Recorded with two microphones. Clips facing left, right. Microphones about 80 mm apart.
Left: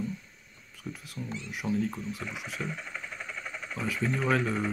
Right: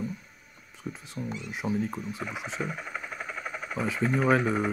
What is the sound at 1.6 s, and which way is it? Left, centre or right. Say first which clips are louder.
Speech: even; right.